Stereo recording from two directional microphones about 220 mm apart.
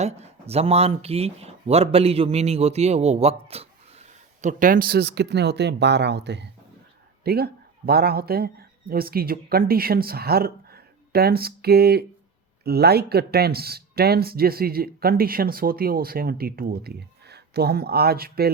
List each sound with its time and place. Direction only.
0.0 s speech: 30° right (ahead or behind); by 18.5 s 45° right (ahead or behind)